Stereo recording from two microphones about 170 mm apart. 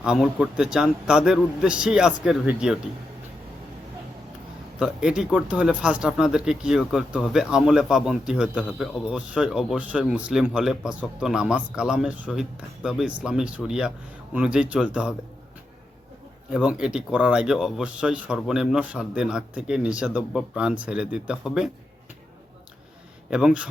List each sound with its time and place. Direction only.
0.0 s speech: 5° right (ahead or behind)
4.8 s speech: 5° right (ahead or behind)
16.5 s speech: 5° right (ahead or behind)
23.3 s speech: 5° right (ahead or behind)